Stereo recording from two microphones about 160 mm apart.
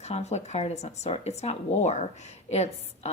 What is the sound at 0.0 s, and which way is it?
Speech, 40° left (ahead or behind).